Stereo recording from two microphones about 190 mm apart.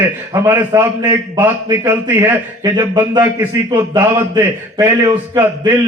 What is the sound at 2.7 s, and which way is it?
A man's voice, 20° right (ahead or behind).